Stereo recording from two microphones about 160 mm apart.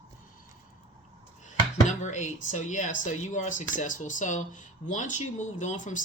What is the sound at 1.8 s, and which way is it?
Speech, 50° left (ahead or behind).